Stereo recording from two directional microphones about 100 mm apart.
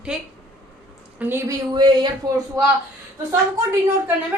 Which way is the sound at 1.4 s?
45° right (ahead or behind).